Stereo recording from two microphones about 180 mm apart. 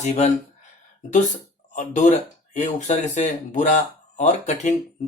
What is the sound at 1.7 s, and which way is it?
Speech, 45° left (ahead or behind).